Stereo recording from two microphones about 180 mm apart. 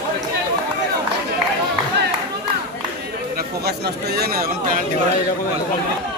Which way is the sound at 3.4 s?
65° right (ahead or behind).